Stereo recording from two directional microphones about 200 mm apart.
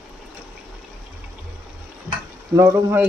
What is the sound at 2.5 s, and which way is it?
Speech, 15° right (ahead or behind).